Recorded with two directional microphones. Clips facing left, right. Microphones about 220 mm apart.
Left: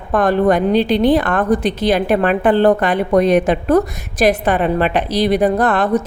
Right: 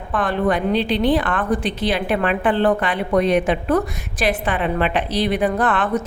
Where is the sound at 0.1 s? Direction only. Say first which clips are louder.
Left 6 dB; 40° left (ahead or behind).